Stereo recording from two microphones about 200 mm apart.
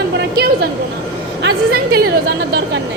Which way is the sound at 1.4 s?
50° right (ahead or behind).